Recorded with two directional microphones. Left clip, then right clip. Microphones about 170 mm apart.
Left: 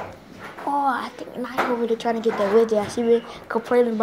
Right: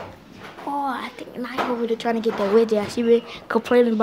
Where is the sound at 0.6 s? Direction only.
Centre (ahead or behind).